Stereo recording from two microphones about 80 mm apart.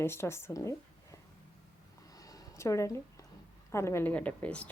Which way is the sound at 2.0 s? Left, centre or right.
Left.